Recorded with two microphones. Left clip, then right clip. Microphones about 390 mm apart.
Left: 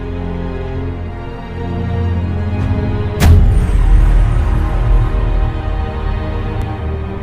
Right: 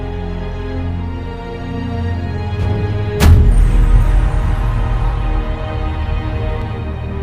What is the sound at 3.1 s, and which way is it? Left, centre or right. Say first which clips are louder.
Music: right 1 dB; centre.